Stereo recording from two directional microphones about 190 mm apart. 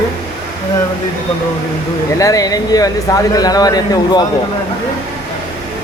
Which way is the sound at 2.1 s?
15° left (ahead or behind).